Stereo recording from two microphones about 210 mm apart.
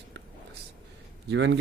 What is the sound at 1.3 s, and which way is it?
Speech, 55° right (ahead or behind).